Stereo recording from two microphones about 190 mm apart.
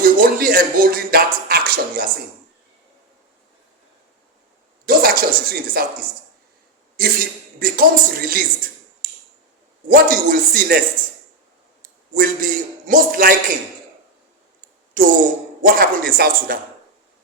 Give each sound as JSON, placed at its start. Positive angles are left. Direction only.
{"t": 0.2, "sound": "speech", "side_deg": -50}
{"t": 4.9, "sound": "a sound", "side_deg": -55}
{"t": 7.0, "sound": "speech", "side_deg": -50}
{"t": 9.0, "sound": "a sound", "side_deg": -50}
{"t": 9.9, "sound": "speech", "side_deg": -50}
{"t": 12.1, "sound": "speech", "side_deg": -45}
{"t": 15.0, "sound": "speech", "side_deg": -45}